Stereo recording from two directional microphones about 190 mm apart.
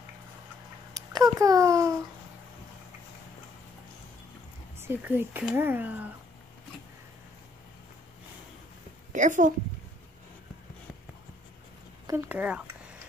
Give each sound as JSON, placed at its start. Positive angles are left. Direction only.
{"t": 1.1, "sound": "a child's voice", "side_deg": -20}
{"t": 4.7, "sound": "speech", "side_deg": -10}
{"t": 9.1, "sound": "a woman's voice", "side_deg": -40}
{"t": 12.1, "sound": "speech", "side_deg": -10}